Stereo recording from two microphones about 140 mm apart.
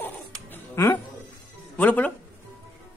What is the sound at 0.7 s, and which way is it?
A child's voice, 20° left (ahead or behind).